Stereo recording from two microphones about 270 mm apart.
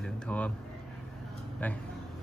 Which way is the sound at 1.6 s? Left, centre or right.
Centre.